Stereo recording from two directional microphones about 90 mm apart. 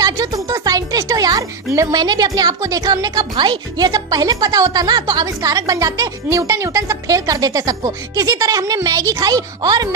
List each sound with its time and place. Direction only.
0.0 s music: 40° right (ahead or behind)
1.7 s a woman's voice: 35° right (ahead or behind)
2.0 s speech: 50° right (ahead or behind)